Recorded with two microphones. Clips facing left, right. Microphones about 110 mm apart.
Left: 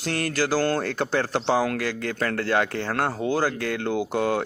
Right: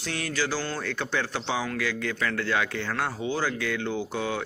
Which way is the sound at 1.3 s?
50° left (ahead or behind).